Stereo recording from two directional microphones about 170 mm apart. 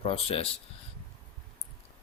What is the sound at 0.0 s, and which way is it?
Speech, 35° left (ahead or behind).